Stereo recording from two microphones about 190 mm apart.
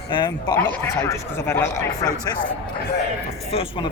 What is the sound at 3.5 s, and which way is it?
Speech, 30° left (ahead or behind).